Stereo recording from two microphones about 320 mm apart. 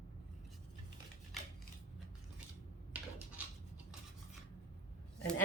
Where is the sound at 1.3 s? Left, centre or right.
Centre.